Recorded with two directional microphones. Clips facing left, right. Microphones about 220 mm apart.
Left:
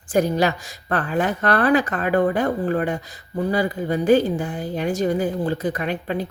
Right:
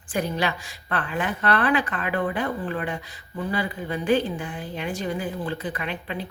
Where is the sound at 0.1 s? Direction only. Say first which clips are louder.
Left 7 dB; 40° left (ahead or behind).